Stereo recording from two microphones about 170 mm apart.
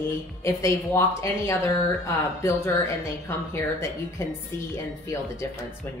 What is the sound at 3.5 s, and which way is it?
Speech, 15° left (ahead or behind).